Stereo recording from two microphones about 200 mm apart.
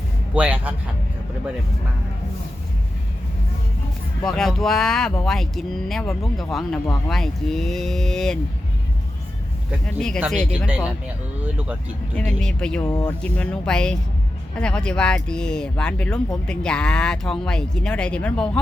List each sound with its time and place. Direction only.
0.3 s a man's voice: 5° right (ahead or behind)
4.2 s speech: 5° left (ahead or behind)
9.8 s speech: 5° left (ahead or behind)
12.1 s speech: 5° left (ahead or behind)
12.8 s speech: 20° left (ahead or behind)
13.1 s speech: 5° left (ahead or behind)